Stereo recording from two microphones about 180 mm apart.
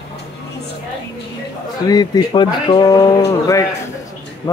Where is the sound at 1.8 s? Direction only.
20° left (ahead or behind).